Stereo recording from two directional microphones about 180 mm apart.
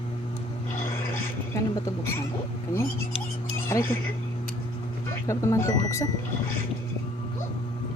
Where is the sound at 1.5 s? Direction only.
20° left (ahead or behind).